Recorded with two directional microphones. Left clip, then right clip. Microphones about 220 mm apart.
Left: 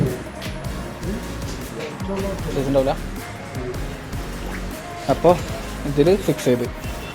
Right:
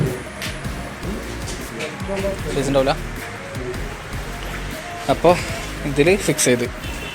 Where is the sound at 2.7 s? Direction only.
5° right (ahead or behind).